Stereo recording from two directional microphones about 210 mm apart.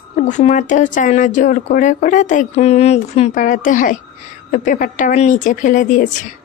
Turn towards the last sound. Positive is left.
turn(degrees=35)  # may be behind; listen again after turning